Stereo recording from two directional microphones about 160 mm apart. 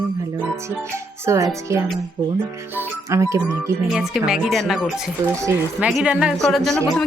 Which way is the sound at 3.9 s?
5° right (ahead or behind).